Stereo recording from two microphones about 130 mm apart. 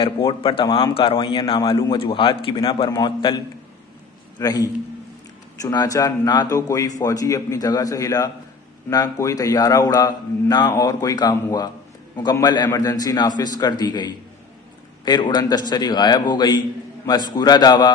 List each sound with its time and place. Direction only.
0.0 s a man's voice: 45° left (ahead or behind)